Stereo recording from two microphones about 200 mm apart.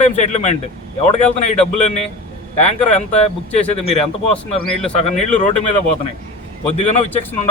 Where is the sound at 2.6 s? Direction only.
35° left (ahead or behind).